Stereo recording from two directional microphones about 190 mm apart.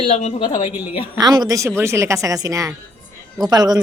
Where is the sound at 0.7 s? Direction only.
10° right (ahead or behind).